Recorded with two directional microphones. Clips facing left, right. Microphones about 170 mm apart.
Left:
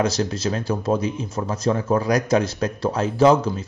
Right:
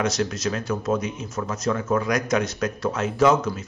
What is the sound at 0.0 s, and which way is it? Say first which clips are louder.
Speech: left 2 dB; 30° left (ahead or behind).